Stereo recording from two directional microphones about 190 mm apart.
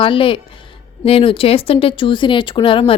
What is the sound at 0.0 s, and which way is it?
Speech, 25° left (ahead or behind).